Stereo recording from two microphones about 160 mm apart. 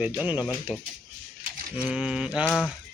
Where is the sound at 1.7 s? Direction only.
5° right (ahead or behind).